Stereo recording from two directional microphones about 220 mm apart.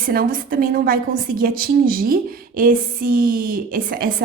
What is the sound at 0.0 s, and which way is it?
A woman's voice, 40° right (ahead or behind).